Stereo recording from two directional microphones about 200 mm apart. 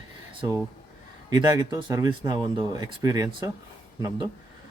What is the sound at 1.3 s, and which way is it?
Speech, 20° right (ahead or behind).